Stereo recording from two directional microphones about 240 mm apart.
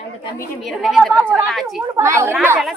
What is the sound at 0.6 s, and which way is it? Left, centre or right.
A woman's voice, centre.